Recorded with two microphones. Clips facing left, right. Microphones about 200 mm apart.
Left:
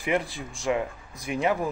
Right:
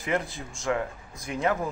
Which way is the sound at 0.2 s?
15° right (ahead or behind).